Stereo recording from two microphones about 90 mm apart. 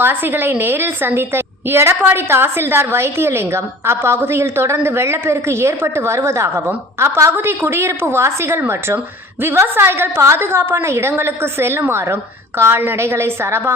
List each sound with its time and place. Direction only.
0.0 s a woman's voice: 20° right (ahead or behind)